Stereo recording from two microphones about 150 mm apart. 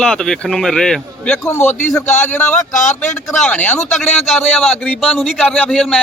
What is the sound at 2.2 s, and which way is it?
A man's voice, 10° left (ahead or behind).